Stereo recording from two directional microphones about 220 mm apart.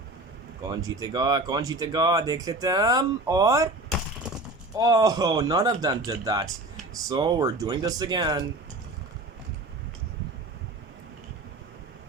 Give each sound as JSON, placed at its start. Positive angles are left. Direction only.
{"t": 0.6, "sound": "speech", "side_deg": -15}
{"t": 4.8, "sound": "speech", "side_deg": -15}